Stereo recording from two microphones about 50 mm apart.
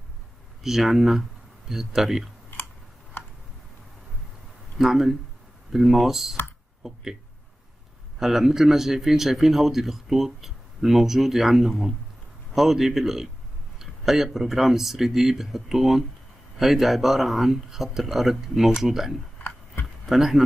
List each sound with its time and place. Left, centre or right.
0.7 s a man's voice: centre
4.7 s a man's voice: centre
8.2 s a man's voice: centre
19.4 s a sound: left
20.1 s speech: centre